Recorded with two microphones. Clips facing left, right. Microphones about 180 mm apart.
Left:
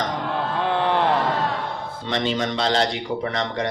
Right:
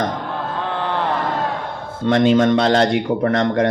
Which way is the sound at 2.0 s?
50° right (ahead or behind).